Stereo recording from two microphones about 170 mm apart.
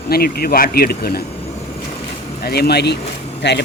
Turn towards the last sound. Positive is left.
turn(degrees=90)